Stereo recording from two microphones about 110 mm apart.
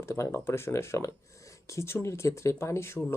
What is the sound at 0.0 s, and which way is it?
Speech, 25° left (ahead or behind).